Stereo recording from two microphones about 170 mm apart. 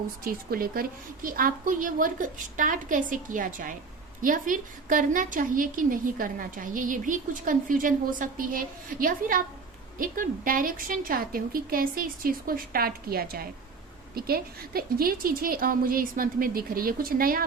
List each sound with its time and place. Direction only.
0.3 s a woman's voice: 60° right (ahead or behind)